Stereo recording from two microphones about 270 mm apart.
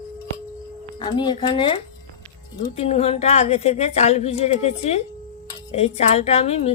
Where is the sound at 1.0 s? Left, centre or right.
Centre.